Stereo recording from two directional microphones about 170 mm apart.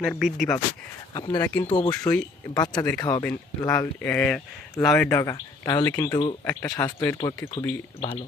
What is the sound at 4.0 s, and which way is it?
Speech, 10° left (ahead or behind).